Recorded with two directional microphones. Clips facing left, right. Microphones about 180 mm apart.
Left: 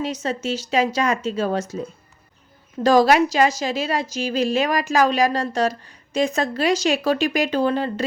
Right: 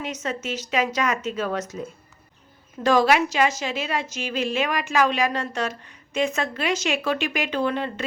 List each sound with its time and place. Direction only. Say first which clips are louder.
0.0 s a woman's voice: left 5 dB; 30° left (ahead or behind)
2.8 s a woman's voice: left 4 dB; 35° left (ahead or behind)